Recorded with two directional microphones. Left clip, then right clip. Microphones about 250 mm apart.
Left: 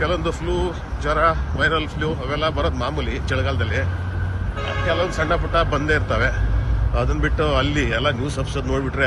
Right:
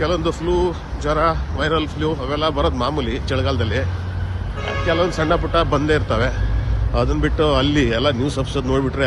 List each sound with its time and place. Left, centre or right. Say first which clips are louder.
0.0 s speech: right 2 dB; centre
4.9 s speech: right 3 dB; right